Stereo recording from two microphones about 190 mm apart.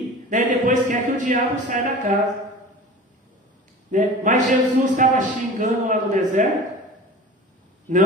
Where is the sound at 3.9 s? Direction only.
40° right (ahead or behind).